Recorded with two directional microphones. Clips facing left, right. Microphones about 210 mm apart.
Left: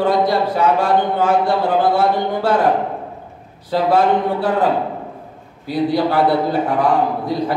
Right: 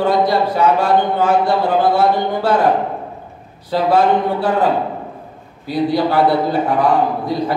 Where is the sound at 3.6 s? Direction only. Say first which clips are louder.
Right 1 dB; 55° left (ahead or behind).